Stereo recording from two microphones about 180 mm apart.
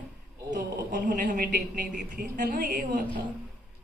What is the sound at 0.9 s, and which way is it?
A woman's voice, 50° right (ahead or behind).